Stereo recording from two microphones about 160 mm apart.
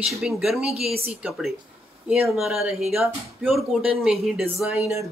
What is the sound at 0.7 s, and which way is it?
Speech, 40° right (ahead or behind).